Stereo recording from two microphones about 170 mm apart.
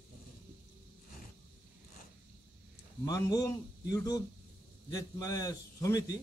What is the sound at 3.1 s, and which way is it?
A man's voice, 20° left (ahead or behind).